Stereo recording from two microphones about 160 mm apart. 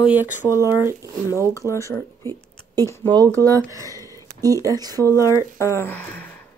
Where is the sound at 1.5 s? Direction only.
20° left (ahead or behind).